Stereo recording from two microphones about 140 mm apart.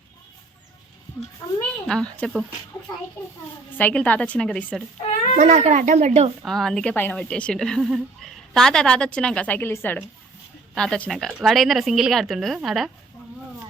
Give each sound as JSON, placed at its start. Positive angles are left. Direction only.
{"t": 1.9, "sound": "a woman's voice", "side_deg": 10}
{"t": 3.8, "sound": "a woman's voice", "side_deg": 10}
{"t": 5.4, "sound": "speech", "side_deg": -55}
{"t": 6.4, "sound": "a woman's voice", "side_deg": 0}
{"t": 6.9, "sound": "a woman's voice", "side_deg": 15}